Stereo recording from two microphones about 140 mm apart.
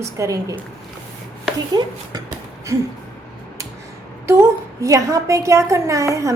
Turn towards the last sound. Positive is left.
turn(degrees=-20)  # may be behind; listen again after turning